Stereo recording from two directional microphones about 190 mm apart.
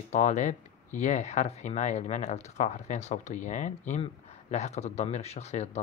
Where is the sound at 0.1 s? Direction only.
40° left (ahead or behind).